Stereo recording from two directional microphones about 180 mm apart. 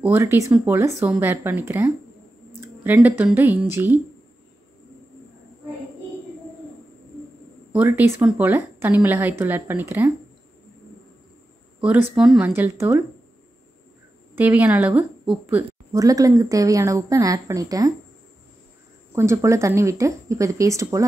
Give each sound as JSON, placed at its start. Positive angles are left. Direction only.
{"t": 0.0, "sound": "a woman's voice", "side_deg": -15}
{"t": 7.7, "sound": "a woman's voice", "side_deg": -10}
{"t": 11.8, "sound": "a woman's voice", "side_deg": -5}
{"t": 14.3, "sound": "a woman's voice", "side_deg": -10}
{"t": 19.1, "sound": "a woman's voice", "side_deg": -15}